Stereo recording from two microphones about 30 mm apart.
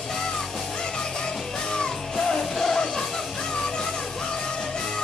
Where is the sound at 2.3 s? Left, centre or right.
Centre.